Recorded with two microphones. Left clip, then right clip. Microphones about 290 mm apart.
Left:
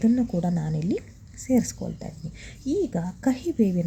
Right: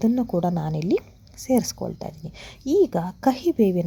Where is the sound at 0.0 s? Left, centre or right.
Right.